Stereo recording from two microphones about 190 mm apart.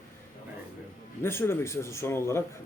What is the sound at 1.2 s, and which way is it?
Speech, 10° left (ahead or behind).